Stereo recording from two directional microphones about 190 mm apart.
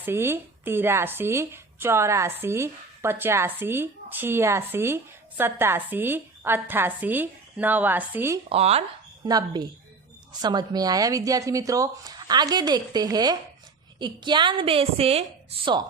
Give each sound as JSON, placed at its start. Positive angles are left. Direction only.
{"t": 0.0, "sound": "speech", "side_deg": -10}
{"t": 8.4, "sound": "speech", "side_deg": -30}
{"t": 9.2, "sound": "speech", "side_deg": -20}